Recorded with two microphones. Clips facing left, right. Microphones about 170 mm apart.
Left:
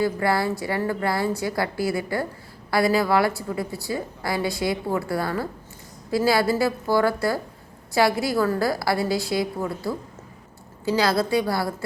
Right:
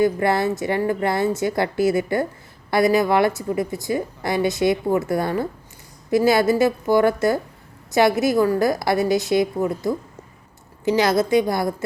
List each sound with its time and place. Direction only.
0.0 s a woman's voice: 20° right (ahead or behind)